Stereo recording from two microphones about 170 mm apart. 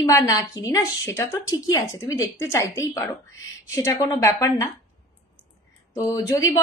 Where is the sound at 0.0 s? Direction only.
20° left (ahead or behind).